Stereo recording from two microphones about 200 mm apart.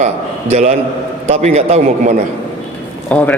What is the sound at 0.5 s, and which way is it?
A man's voice, 35° right (ahead or behind).